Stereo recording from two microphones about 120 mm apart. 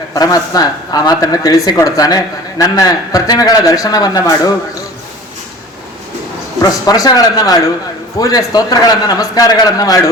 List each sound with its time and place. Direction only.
0.1 s speech: 30° left (ahead or behind)
6.6 s speech: 30° left (ahead or behind)